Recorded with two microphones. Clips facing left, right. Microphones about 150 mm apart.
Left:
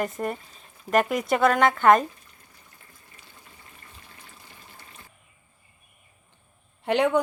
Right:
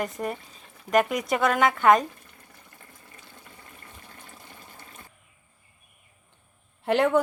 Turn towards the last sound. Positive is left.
turn(degrees=0)  # may be behind; listen again after turning